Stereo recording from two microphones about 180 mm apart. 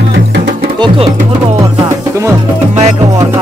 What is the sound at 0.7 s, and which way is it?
Speech, 30° right (ahead or behind).